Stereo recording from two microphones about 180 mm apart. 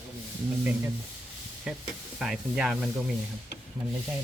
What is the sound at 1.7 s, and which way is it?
Spray, 5° right (ahead or behind).